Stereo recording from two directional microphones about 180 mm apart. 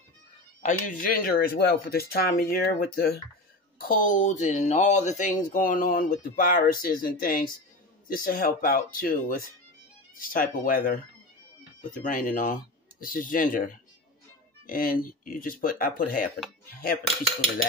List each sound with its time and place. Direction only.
0.6 s speech: 45° left (ahead or behind)
12.0 s speech: 50° left (ahead or behind)